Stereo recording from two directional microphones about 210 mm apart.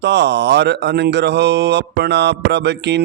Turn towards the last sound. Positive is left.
turn(degrees=-55)  # may be behind; listen again after turning